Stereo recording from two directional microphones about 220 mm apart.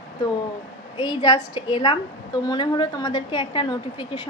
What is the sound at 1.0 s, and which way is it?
A woman's voice, 20° left (ahead or behind).